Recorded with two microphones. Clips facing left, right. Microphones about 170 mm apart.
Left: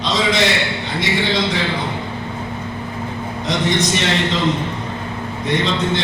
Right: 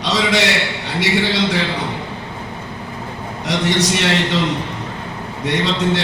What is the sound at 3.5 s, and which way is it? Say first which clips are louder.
Speech: right 1 dB; 75° right (ahead or behind).